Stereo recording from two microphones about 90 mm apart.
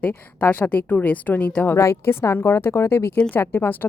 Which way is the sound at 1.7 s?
30° left (ahead or behind).